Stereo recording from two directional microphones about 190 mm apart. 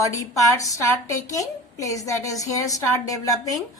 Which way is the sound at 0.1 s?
15° left (ahead or behind).